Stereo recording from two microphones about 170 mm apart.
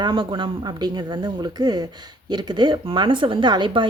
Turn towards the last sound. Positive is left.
turn(degrees=-25)  # may be behind; listen again after turning